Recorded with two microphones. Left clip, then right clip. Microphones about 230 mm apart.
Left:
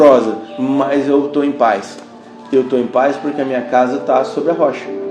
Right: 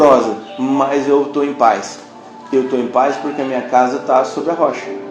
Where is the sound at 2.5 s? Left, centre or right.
Left.